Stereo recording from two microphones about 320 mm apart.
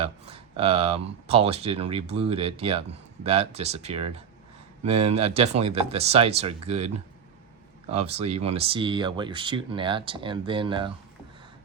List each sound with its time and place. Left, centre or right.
0.0 s speech: centre